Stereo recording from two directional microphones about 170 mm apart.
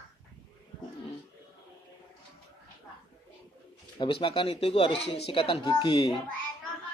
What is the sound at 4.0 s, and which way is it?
A man's voice, 30° left (ahead or behind).